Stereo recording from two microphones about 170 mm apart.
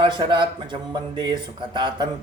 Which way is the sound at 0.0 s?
30° right (ahead or behind).